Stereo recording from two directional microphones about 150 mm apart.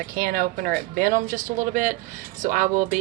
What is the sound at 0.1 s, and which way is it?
Speech, 70° right (ahead or behind).